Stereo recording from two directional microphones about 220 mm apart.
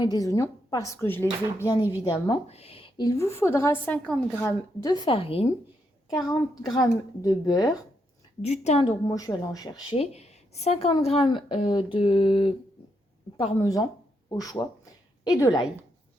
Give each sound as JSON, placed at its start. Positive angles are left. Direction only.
{"t": 0.0, "sound": "a woman's voice", "side_deg": 15}
{"t": 8.4, "sound": "speech", "side_deg": 30}
{"t": 9.0, "sound": "a woman's voice", "side_deg": 15}
{"t": 9.9, "sound": "a woman's voice", "side_deg": 30}
{"t": 13.6, "sound": "a woman's voice", "side_deg": 15}